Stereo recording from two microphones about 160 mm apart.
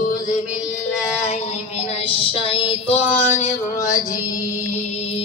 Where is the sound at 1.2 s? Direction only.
40° left (ahead or behind).